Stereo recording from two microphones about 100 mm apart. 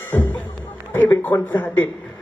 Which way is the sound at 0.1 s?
25° left (ahead or behind).